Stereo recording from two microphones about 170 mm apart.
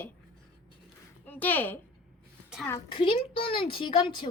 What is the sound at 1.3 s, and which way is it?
Speech, 10° left (ahead or behind).